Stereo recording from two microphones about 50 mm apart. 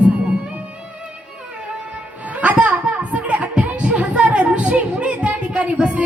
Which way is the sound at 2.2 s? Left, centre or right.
Right.